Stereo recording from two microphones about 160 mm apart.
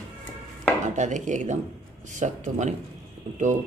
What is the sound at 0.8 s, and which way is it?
A man's voice, 50° right (ahead or behind).